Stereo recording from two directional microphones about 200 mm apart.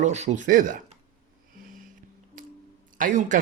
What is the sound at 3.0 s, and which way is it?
Speech, 40° right (ahead or behind).